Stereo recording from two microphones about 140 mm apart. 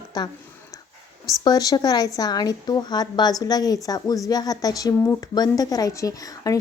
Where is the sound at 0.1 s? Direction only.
30° left (ahead or behind).